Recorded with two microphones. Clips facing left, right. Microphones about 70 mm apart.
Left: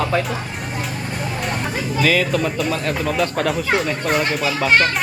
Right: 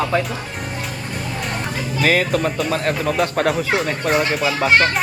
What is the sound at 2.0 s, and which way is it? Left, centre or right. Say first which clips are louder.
Speech: right 1 dB; right.